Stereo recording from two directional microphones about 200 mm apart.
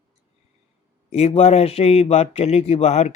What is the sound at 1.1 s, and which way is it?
Speech, 30° left (ahead or behind).